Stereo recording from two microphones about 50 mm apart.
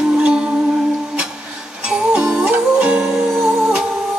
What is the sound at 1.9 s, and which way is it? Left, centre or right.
Music, centre.